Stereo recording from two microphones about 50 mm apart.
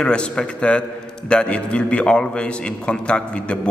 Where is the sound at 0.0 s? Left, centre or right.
Centre.